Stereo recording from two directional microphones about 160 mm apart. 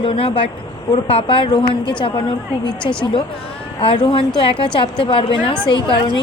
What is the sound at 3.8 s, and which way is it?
A woman's voice, 35° left (ahead or behind).